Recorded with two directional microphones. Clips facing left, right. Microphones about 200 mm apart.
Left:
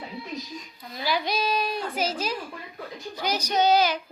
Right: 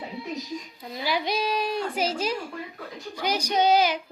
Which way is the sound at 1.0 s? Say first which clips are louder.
Even; 25° right (ahead or behind).